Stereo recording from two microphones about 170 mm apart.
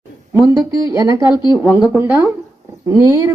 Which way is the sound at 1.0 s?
20° right (ahead or behind).